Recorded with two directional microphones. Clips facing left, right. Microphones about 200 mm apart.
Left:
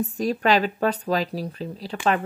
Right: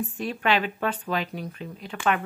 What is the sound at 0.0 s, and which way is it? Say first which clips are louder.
Speech: left 5 dB; 40° left (ahead or behind).